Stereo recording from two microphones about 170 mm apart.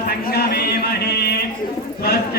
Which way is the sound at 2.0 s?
65° left (ahead or behind).